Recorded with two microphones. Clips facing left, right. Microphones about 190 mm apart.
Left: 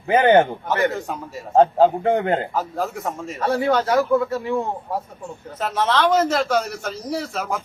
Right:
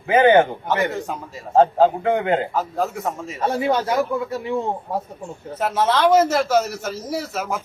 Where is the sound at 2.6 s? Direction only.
Centre (ahead or behind).